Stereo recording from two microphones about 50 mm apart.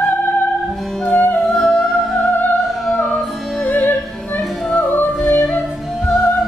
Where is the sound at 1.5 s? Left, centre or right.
Centre.